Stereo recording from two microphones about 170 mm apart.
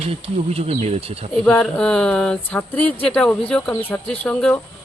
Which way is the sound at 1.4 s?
5° left (ahead or behind).